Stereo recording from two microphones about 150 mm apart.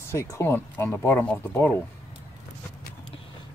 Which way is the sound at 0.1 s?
20° left (ahead or behind).